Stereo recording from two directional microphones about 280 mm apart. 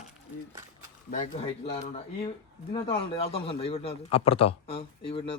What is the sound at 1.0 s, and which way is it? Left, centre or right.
Speech, left.